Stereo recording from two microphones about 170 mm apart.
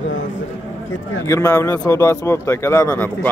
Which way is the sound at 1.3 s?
20° left (ahead or behind).